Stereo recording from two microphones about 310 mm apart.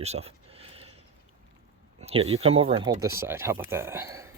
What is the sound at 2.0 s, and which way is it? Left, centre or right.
Speech, centre.